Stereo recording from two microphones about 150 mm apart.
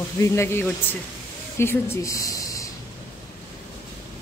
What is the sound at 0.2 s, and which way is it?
A woman's voice, 15° left (ahead or behind).